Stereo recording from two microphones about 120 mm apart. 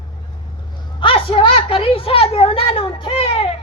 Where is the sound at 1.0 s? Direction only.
45° left (ahead or behind).